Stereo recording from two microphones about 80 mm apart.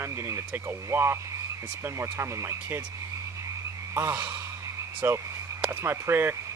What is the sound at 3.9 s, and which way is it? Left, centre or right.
Speech, right.